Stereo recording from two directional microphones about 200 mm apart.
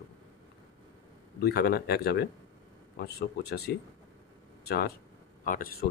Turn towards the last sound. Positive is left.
turn(degrees=50)  # may be behind; listen again after turning